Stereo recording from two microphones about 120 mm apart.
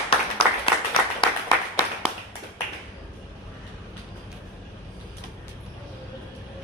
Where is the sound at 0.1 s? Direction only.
50° left (ahead or behind).